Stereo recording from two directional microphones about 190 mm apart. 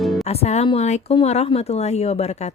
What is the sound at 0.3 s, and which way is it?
A woman's voice, 35° left (ahead or behind).